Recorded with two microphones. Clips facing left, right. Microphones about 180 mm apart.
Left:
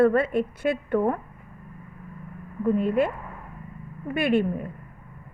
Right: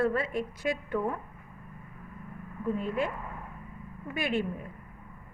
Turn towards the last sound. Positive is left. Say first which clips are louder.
# left 8 dB
turn(degrees=60)  # may be behind; listen again after turning